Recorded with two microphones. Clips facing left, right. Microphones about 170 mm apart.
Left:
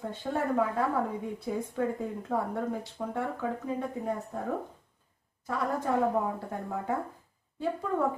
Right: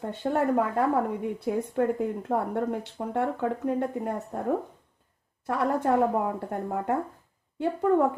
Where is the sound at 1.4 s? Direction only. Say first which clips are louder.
Right 5 dB; 60° right (ahead or behind).